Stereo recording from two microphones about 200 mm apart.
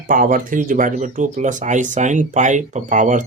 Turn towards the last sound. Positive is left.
turn(degrees=-40)  # may be behind; listen again after turning